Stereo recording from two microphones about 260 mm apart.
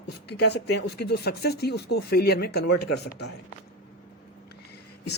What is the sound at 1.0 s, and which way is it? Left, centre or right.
Speech, left.